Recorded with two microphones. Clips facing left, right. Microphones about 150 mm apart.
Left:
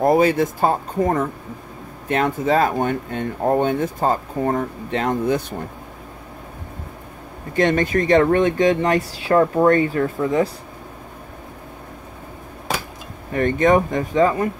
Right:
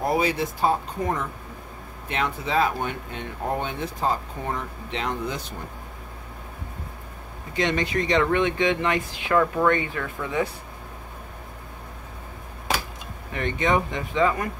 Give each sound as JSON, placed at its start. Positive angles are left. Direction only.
{"t": 0.0, "sound": "speech", "side_deg": 50}
{"t": 7.5, "sound": "speech", "side_deg": 50}
{"t": 13.3, "sound": "speech", "side_deg": 45}